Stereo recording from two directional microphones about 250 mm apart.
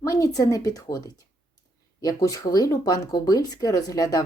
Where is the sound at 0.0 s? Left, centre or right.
Centre.